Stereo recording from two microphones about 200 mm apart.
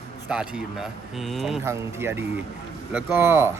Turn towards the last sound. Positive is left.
turn(degrees=-10)  # may be behind; listen again after turning